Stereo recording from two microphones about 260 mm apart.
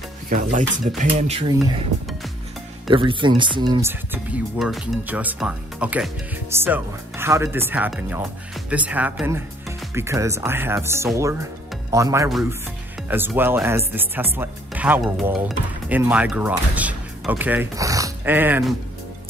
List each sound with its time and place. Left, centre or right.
0.3 s speech: right
2.9 s speech: centre
12.3 s speech: centre